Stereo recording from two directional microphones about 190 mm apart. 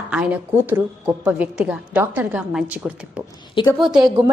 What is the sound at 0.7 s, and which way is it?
A woman's voice, 10° right (ahead or behind).